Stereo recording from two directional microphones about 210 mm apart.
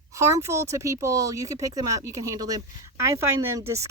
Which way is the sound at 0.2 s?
15° right (ahead or behind).